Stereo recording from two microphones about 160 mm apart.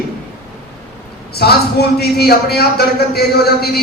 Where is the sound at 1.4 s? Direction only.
80° left.